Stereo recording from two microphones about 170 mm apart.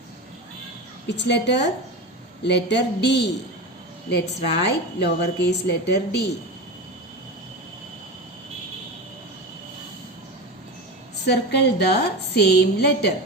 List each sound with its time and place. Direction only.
1.1 s a woman's voice: 90° left
11.3 s a woman's voice: 75° left (ahead or behind)